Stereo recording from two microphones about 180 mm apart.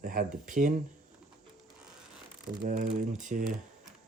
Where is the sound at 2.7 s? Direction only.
45° right (ahead or behind).